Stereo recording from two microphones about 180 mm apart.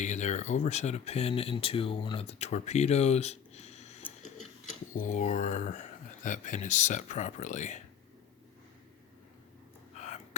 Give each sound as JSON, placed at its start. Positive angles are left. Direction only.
{"t": 0.0, "sound": "speech", "side_deg": 40}
{"t": 5.1, "sound": "speech", "side_deg": 45}